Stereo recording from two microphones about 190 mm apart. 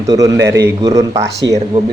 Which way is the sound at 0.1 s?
20° right (ahead or behind).